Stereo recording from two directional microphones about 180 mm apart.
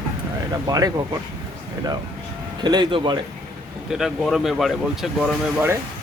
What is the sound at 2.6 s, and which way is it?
Speech, 25° right (ahead or behind).